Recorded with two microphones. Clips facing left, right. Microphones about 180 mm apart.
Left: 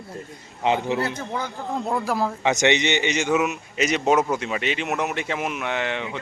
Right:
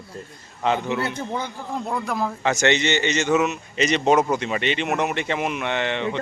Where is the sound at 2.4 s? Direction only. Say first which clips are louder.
Right 1 dB; 15° left (ahead or behind).